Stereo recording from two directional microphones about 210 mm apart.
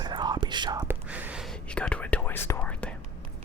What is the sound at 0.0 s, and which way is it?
Whispering, 20° right (ahead or behind).